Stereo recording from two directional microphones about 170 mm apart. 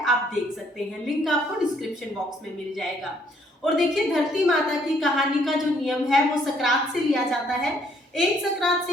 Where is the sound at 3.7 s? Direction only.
Centre (ahead or behind).